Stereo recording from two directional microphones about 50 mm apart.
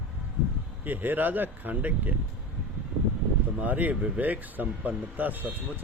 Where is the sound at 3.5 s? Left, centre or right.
Right.